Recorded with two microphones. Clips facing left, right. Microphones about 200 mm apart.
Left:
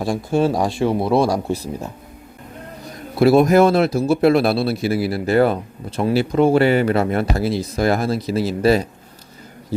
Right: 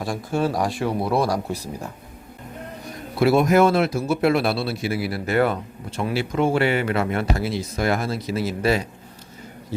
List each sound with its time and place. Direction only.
0.0 s speech: 30° left (ahead or behind)
3.2 s speech: 35° left (ahead or behind)